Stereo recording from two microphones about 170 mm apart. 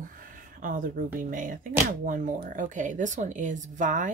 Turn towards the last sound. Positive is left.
turn(degrees=-50)  # may be behind; listen again after turning